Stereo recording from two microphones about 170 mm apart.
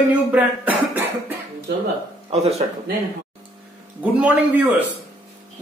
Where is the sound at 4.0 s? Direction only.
10° right (ahead or behind).